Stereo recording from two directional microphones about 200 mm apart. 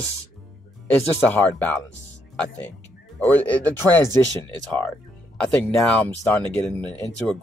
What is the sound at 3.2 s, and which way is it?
Speech, 10° left (ahead or behind).